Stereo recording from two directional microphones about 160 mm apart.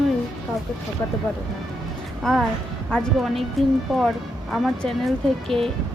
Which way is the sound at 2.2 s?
Centre (ahead or behind).